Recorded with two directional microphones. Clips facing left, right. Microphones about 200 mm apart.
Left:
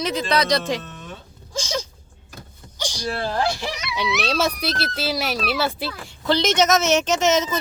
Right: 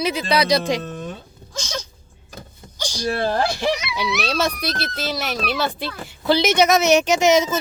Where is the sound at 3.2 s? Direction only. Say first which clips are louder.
Right 1 dB; 55° right (ahead or behind).